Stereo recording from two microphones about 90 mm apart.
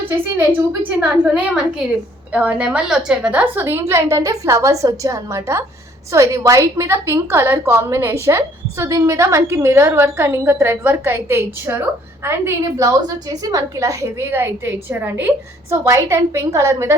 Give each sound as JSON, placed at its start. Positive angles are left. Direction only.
{"t": 0.5, "sound": "a woman's voice", "side_deg": -20}